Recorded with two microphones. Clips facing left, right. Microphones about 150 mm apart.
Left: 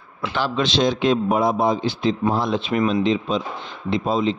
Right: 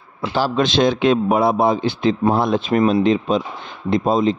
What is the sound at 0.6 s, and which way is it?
A man's voice, 50° right (ahead or behind).